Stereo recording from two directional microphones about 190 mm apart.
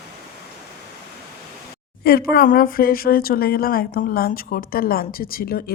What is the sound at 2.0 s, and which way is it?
Speech, 55° left (ahead or behind).